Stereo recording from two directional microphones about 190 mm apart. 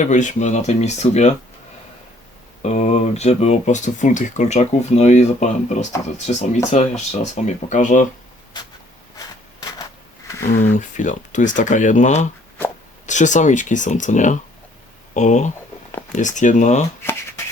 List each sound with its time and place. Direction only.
0.0 s speech: 40° left (ahead or behind)
2.6 s speech: 35° left (ahead or behind)
9.1 s a sound: 20° left (ahead or behind)
10.6 s speech: 40° left (ahead or behind)
17.0 s shuffling cards: 15° left (ahead or behind)